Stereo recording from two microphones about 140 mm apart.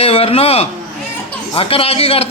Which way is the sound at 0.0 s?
45° left (ahead or behind).